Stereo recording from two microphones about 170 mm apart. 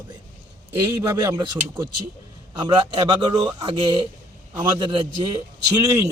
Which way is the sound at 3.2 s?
25° right (ahead or behind).